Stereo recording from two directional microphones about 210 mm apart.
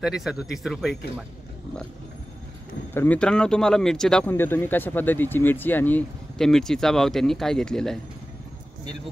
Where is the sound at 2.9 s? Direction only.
10° left (ahead or behind).